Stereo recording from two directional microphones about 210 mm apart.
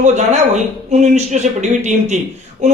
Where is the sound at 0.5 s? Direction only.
35° right (ahead or behind).